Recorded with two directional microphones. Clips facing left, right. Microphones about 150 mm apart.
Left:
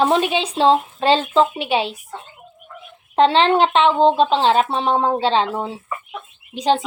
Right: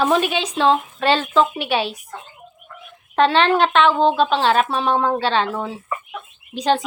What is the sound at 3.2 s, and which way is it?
A woman's voice, 25° left (ahead or behind).